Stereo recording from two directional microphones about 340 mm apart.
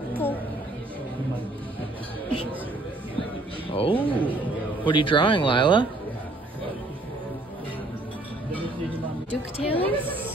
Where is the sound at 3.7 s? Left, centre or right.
Centre.